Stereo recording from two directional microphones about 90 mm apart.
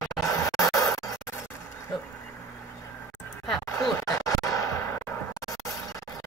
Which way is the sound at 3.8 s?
40° left (ahead or behind).